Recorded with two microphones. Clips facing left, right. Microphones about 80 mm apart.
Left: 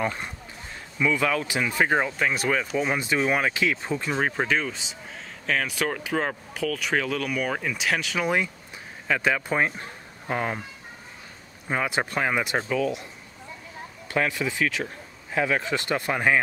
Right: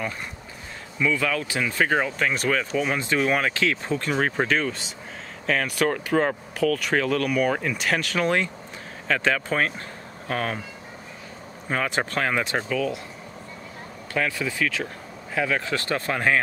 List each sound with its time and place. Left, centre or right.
0.9 s speech: centre
11.7 s speech: centre
12.7 s speech: left
14.1 s speech: left